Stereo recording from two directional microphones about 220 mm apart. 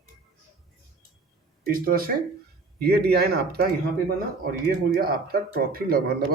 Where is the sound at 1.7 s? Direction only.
40° right (ahead or behind).